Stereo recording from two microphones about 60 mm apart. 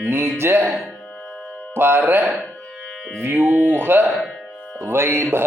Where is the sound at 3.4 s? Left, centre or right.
Right.